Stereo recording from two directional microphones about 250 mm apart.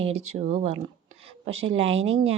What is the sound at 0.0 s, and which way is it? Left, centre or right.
A woman's voice, right.